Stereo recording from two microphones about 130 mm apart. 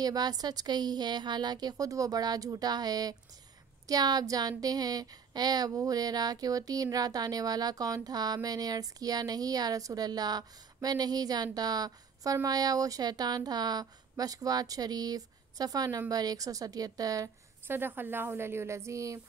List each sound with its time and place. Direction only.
0.0 s a woman's voice: 30° right (ahead or behind)
17.6 s speech: 15° right (ahead or behind)